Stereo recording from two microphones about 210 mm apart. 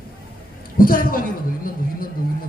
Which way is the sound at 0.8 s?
40° left (ahead or behind).